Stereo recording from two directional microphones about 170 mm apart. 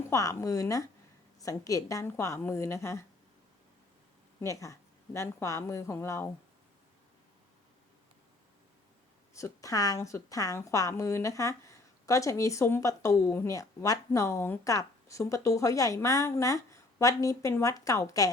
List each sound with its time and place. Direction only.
0.1 s a woman's voice: 20° left (ahead or behind)
4.4 s a woman's voice: 20° left (ahead or behind)
9.3 s a woman's voice: 20° left (ahead or behind)